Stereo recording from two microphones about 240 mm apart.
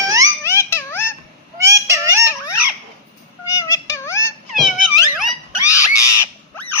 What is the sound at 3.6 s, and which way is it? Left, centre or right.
Synthetic singing, centre.